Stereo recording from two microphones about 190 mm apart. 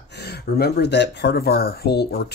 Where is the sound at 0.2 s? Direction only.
60° left (ahead or behind).